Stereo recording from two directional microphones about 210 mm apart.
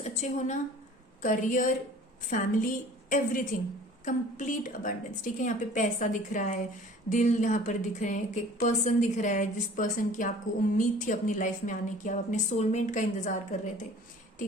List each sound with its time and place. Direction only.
0.0 s a woman's voice: 35° left (ahead or behind)